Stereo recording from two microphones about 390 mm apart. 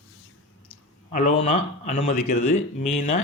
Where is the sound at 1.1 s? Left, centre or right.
Centre.